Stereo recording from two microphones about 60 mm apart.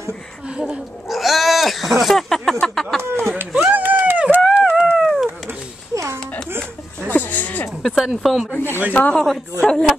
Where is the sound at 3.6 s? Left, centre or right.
Right.